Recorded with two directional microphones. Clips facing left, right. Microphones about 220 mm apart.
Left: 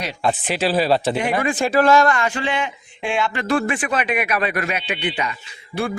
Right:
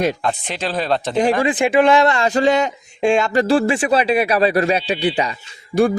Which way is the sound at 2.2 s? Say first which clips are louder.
Right 7 dB; 40° right (ahead or behind).